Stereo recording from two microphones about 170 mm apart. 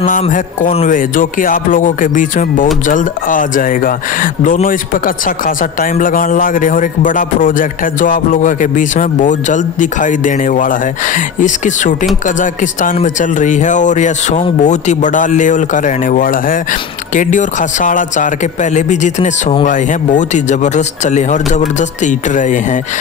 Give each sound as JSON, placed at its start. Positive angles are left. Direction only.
{"t": 0.2, "sound": "speech", "side_deg": 45}